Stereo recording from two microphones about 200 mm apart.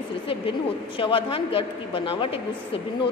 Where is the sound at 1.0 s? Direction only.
25° left (ahead or behind).